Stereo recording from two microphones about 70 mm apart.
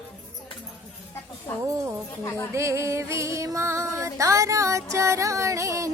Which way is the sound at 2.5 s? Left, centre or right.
Right.